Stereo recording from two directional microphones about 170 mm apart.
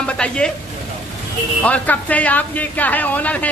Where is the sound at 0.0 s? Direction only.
5° left (ahead or behind).